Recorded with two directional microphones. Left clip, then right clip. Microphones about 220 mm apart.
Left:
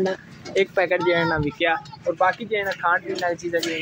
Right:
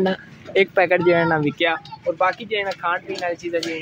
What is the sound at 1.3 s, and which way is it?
Speech, 35° right (ahead or behind).